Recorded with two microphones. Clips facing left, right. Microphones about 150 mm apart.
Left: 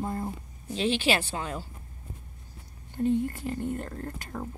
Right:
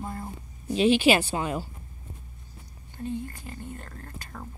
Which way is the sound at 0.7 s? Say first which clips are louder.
Right 6 dB; 10° right (ahead or behind).